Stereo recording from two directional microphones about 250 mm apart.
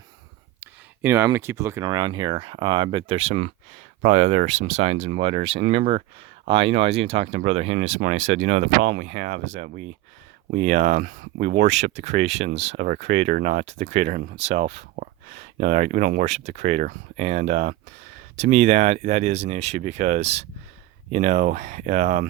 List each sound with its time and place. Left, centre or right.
0.6 s speech: centre; by 12.5 s right
12.5 s speech: right